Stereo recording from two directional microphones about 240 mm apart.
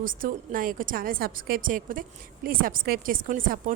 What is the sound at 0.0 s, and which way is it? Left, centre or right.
A woman's voice, right.